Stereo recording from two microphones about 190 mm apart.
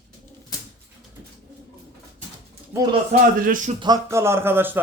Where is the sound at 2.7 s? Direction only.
10° right (ahead or behind).